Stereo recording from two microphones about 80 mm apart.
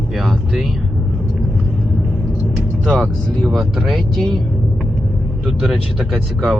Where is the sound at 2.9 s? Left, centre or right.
Centre.